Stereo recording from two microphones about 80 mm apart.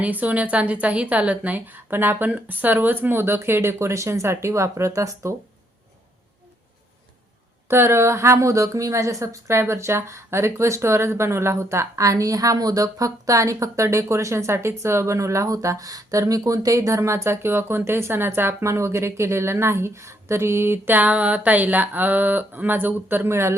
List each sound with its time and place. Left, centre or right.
0.0 s a woman's voice: centre; by 5.3 s right
7.7 s a woman's voice: right